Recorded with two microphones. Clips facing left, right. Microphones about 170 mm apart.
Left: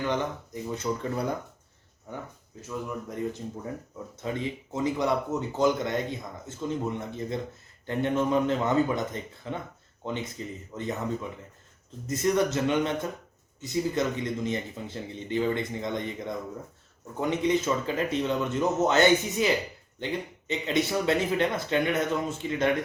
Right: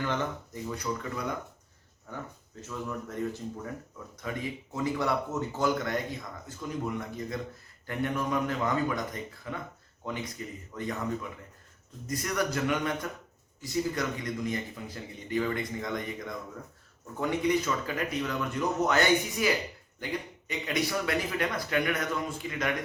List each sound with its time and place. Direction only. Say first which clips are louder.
0.0 s speech: left 3 dB; 20° left (ahead or behind)
1.1 s speech: left 4 dB; 35° left (ahead or behind)
2.1 s speech: left 2 dB; 20° left (ahead or behind)
3.9 s speech: left 6 dB; 25° left (ahead or behind)